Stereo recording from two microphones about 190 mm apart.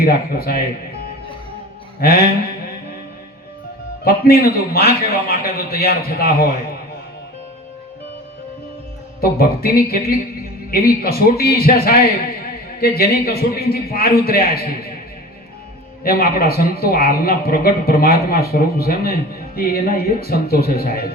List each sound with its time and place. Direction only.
0.0 s a man's voice: 50° left (ahead or behind)
2.0 s a man's voice: 55° left (ahead or behind)
4.0 s a man's voice: 50° left (ahead or behind)
9.2 s a man's voice: 50° left (ahead or behind)
16.0 s a man's voice: 50° left (ahead or behind)